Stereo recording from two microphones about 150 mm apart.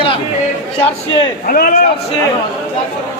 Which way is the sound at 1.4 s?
65° left (ahead or behind).